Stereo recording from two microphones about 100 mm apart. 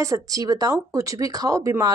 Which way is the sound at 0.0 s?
35° right (ahead or behind).